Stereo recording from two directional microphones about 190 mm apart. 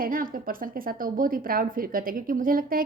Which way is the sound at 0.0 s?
45° right (ahead or behind).